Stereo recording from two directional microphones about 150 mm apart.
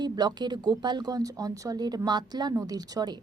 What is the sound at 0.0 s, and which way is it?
A woman's voice, 30° right (ahead or behind).